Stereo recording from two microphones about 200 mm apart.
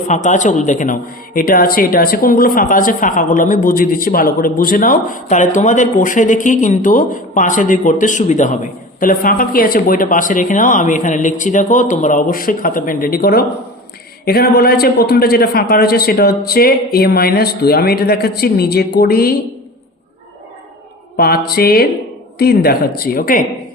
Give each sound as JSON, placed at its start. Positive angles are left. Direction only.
{"t": 0.1, "sound": "a man's voice", "side_deg": 35}
{"t": 21.2, "sound": "a man's voice", "side_deg": 50}